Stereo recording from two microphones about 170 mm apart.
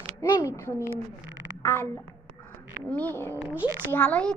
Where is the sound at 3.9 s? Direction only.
5° left (ahead or behind).